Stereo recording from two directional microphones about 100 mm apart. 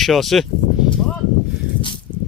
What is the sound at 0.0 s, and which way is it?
Speech, centre (ahead or behind).